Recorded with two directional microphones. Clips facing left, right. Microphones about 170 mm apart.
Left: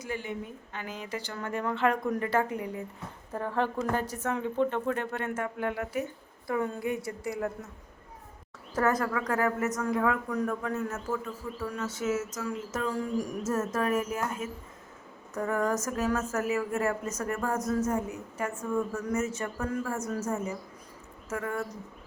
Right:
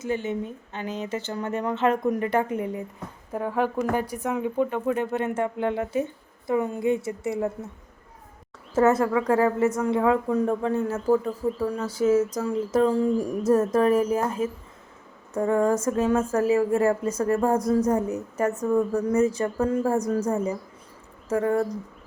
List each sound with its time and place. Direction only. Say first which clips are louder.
0.0 s a woman's voice: right 8 dB; 25° right (ahead or behind)
3.3 s a woman's voice: right 5 dB; 10° right (ahead or behind)
8.7 s a woman's voice: right 7 dB; 25° right (ahead or behind)